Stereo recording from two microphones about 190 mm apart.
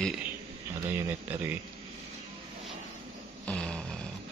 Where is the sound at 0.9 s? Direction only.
10° right (ahead or behind).